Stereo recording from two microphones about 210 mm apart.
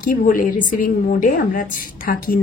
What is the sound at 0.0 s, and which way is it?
A woman's voice, 40° left (ahead or behind).